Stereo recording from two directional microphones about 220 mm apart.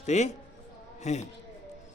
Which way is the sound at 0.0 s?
30° left (ahead or behind).